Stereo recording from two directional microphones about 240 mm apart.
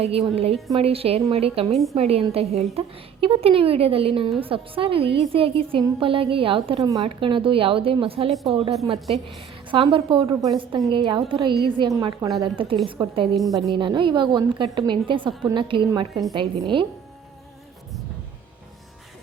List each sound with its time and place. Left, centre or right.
0.0 s a woman's voice: right
9.7 s a woman's voice: right